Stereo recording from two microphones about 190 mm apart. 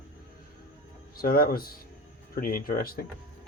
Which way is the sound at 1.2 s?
50° left (ahead or behind).